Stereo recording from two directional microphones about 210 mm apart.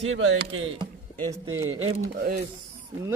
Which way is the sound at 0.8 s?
15° right (ahead or behind).